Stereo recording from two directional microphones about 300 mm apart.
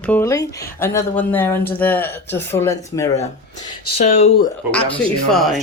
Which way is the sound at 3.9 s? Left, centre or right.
Left.